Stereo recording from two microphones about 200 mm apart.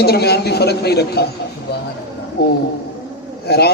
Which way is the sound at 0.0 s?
55° left (ahead or behind).